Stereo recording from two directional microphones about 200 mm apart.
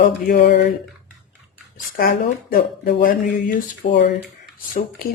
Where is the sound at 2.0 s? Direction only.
50° left (ahead or behind).